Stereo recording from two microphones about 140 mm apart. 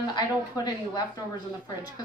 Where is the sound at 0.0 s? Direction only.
30° left (ahead or behind).